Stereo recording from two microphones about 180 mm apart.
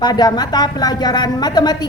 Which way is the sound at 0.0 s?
20° left (ahead or behind).